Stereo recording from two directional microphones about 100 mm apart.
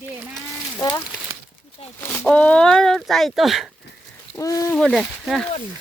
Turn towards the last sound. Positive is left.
turn(degrees=0)  # may be behind; listen again after turning